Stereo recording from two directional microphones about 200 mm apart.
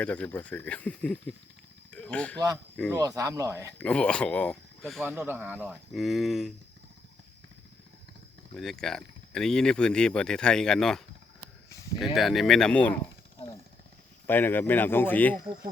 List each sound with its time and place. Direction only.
0.0 s speech: 5° left (ahead or behind)
1.9 s a sound: 5° left (ahead or behind)
2.9 s speech: 15° right (ahead or behind)
3.8 s speech: 5° left (ahead or behind)
5.0 s speech: 10° right (ahead or behind)
8.5 s speech: centre (ahead or behind)
14.3 s speech: 10° left (ahead or behind)